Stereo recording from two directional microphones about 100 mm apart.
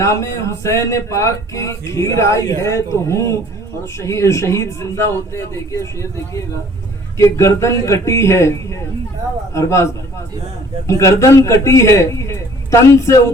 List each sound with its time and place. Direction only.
0.0 s speech: 30° left (ahead or behind)